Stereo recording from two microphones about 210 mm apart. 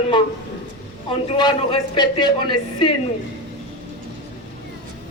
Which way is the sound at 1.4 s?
20° left (ahead or behind).